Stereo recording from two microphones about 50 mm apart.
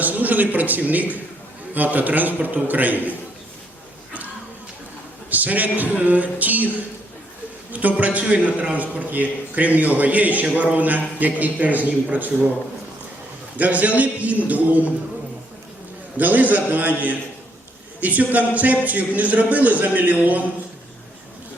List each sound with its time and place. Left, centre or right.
0.0 s a man's voice: right
5.3 s a man's voice: right
7.7 s a man's voice: right
13.6 s a man's voice: right
16.1 s a man's voice: right
18.0 s a man's voice: right